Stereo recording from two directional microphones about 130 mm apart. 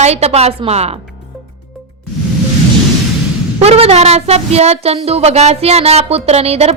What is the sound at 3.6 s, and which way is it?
Speech, 50° right (ahead or behind).